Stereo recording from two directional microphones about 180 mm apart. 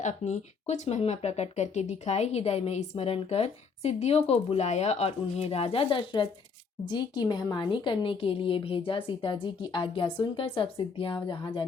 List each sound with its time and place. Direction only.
0.0 s a woman's voice: 40° left (ahead or behind)